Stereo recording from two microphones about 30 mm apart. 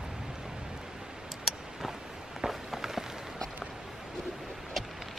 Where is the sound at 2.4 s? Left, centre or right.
Centre.